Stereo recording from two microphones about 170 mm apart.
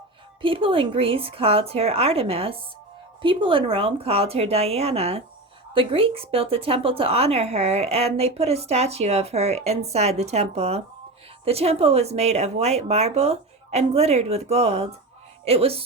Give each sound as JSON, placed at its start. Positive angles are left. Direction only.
{"t": 0.4, "sound": "speech", "side_deg": -30}